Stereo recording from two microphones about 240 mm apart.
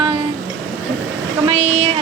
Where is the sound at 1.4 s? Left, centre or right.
Right.